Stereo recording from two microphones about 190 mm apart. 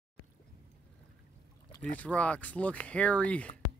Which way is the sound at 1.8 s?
10° left (ahead or behind).